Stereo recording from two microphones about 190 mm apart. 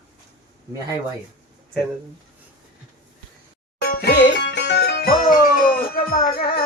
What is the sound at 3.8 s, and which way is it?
Music, 55° left (ahead or behind).